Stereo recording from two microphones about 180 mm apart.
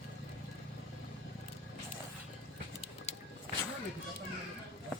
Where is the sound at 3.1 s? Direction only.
35° left (ahead or behind).